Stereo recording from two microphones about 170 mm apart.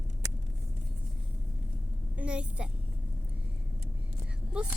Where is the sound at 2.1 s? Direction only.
5° right (ahead or behind).